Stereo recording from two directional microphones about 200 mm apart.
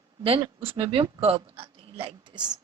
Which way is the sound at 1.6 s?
25° right (ahead or behind).